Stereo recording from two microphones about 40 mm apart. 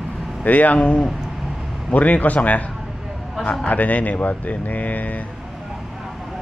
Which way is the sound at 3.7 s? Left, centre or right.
Left.